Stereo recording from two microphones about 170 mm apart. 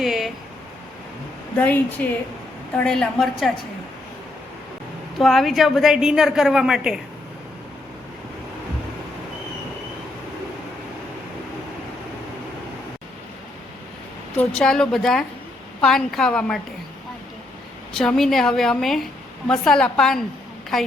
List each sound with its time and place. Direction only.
0.0 s a sound: centre (ahead or behind)
1.5 s a woman's voice: 10° left (ahead or behind)
5.1 s a woman's voice: centre (ahead or behind)
14.3 s a woman's voice: 5° left (ahead or behind)
17.9 s a woman's voice: 5° left (ahead or behind)